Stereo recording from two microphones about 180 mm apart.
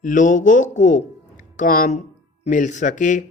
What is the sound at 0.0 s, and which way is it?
Speech, 45° left (ahead or behind).